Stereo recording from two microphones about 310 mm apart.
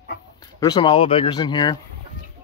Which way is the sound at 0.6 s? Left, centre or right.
Centre.